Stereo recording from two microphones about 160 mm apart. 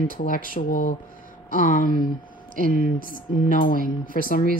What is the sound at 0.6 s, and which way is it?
Speech, 55° left (ahead or behind).